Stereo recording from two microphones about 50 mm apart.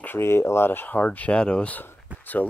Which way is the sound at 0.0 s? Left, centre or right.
Left.